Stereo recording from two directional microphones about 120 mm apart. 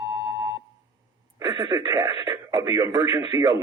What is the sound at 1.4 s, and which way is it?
Speech, 35° right (ahead or behind).